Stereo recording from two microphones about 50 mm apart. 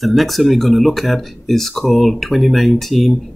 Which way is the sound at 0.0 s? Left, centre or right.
Centre.